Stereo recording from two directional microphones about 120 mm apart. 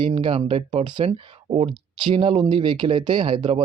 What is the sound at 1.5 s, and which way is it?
Speech, 45° right (ahead or behind).